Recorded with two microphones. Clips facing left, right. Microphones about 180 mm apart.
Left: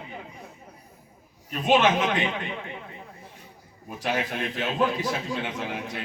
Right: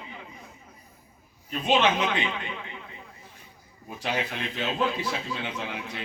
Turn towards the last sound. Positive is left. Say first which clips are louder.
# left 2 dB
turn(degrees=45)  # may be behind; listen again after turning